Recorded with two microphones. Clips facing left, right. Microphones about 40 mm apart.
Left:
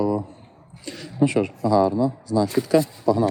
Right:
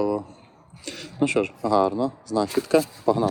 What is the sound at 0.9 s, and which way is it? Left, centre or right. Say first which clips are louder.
Speech: left 3 dB; right.